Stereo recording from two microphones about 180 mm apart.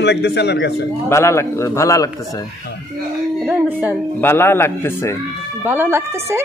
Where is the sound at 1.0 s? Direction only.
15° left (ahead or behind).